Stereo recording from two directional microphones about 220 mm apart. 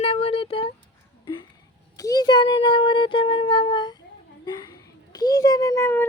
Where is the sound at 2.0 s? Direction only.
15° left (ahead or behind).